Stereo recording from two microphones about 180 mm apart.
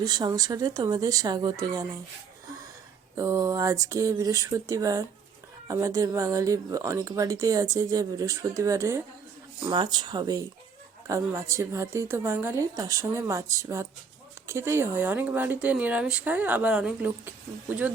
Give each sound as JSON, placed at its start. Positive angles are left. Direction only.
{"t": 0.0, "sound": "speech", "side_deg": -20}
{"t": 3.2, "sound": "speech", "side_deg": -20}